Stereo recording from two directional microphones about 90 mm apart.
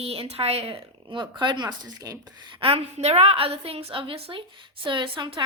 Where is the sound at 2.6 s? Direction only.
90° right.